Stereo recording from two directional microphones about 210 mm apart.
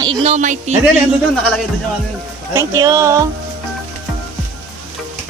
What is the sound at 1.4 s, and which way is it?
Speech, centre (ahead or behind).